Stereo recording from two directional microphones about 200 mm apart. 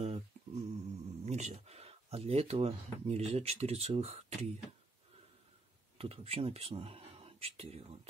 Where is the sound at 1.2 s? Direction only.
35° right (ahead or behind).